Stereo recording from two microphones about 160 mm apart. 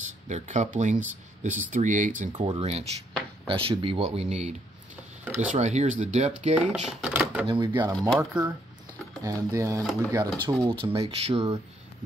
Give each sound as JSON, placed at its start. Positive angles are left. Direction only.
{"t": 0.3, "sound": "speech", "side_deg": -50}
{"t": 2.3, "sound": "speech", "side_deg": -35}
{"t": 5.2, "sound": "a sound", "side_deg": -10}
{"t": 5.5, "sound": "speech", "side_deg": -45}
{"t": 6.9, "sound": "typewriter", "side_deg": -5}
{"t": 7.4, "sound": "speech", "side_deg": -30}
{"t": 8.3, "sound": "speech", "side_deg": -5}
{"t": 9.2, "sound": "speech", "side_deg": -20}